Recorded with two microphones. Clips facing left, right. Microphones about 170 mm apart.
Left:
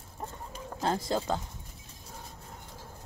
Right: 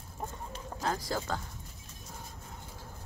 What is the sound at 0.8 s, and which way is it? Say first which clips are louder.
Speech: left 4 dB; 25° left (ahead or behind).